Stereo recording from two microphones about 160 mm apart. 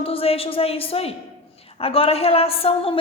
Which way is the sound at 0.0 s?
35° left (ahead or behind).